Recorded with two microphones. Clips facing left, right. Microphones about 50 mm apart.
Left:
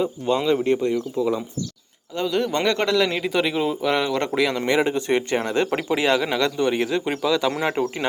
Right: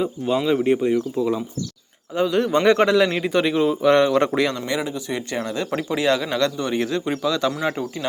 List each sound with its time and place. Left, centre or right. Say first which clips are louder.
0.0 s a man's voice: even; centre
1.2 s a man's voice: even; centre
4.5 s speech: left 5 dB; left
4.9 s speech: left 6 dB; left
5.9 s speech: right 2 dB; left